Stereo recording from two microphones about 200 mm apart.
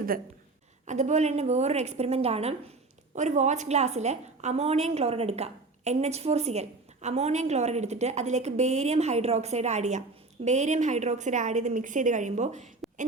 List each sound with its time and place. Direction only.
0.9 s a woman's voice: 35° right (ahead or behind)